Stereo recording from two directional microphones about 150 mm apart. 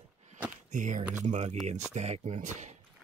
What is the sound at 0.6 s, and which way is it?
Speech, 55° right (ahead or behind).